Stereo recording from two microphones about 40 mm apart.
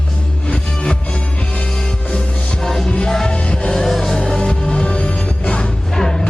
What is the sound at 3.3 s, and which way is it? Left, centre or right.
Music, left.